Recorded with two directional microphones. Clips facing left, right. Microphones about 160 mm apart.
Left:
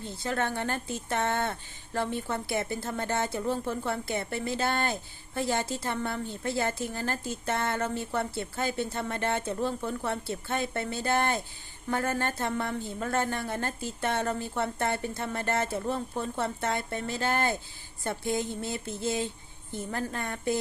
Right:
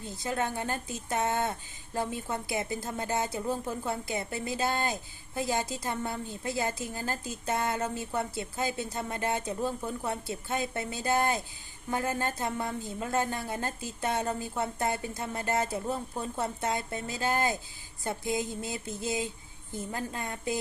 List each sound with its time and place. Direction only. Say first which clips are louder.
0.2 s speech: left 1 dB; 15° right (ahead or behind)